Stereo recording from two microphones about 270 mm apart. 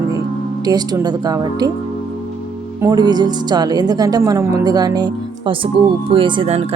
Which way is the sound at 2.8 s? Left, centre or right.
Centre.